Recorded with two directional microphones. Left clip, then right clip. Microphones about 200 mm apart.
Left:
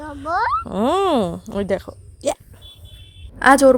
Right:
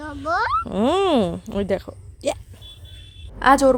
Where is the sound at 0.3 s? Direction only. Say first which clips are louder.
Left 1 dB; 20° right (ahead or behind).